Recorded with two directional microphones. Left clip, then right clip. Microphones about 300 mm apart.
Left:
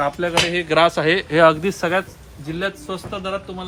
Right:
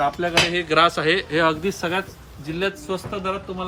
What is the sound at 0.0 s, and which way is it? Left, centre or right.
Speech, left.